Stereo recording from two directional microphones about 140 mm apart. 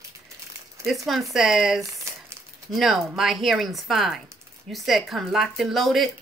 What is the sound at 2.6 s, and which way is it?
Speech, centre (ahead or behind).